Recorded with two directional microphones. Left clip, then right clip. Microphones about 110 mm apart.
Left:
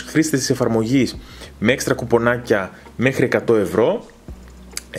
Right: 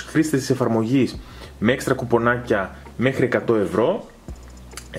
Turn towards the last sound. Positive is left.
turn(degrees=35)  # may be behind; listen again after turning